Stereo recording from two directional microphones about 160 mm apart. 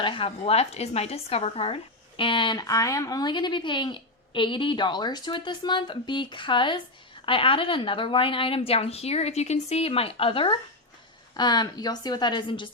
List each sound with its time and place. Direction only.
0.0 s a woman's voice: 35° left (ahead or behind)